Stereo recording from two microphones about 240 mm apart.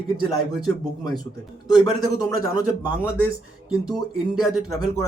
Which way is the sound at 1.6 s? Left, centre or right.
Centre.